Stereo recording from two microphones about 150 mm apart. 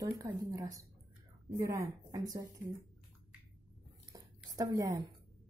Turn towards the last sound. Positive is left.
turn(degrees=-25)  # may be behind; listen again after turning